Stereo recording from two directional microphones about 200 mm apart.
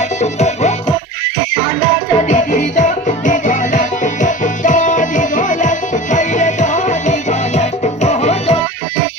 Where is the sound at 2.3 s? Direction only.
40° left (ahead or behind).